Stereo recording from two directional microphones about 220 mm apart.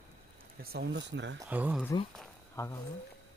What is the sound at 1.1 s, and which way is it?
Speech, 55° right (ahead or behind).